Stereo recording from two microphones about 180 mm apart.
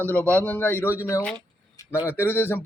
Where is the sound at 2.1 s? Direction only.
10° left (ahead or behind).